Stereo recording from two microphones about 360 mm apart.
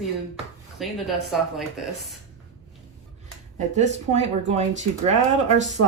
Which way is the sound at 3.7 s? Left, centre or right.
Centre.